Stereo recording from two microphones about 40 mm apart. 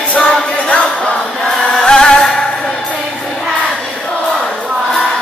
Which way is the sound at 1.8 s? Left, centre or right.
Centre.